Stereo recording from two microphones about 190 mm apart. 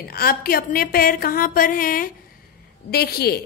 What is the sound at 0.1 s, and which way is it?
A woman's voice, 50° left (ahead or behind).